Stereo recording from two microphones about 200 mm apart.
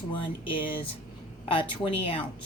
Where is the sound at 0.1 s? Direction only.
25° left (ahead or behind).